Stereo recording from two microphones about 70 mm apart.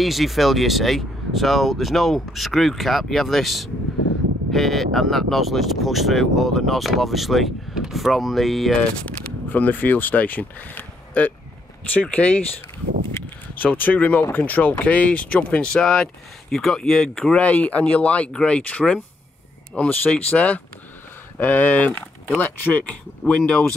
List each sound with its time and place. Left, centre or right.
0.0 s speech: centre
9.0 s speech: left
13.6 s speech: left; by 17.4 s centre
17.4 s speech: left